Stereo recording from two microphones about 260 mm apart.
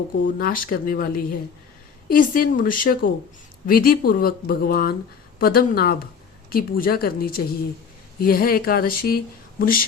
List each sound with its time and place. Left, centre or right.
0.3 s speech: left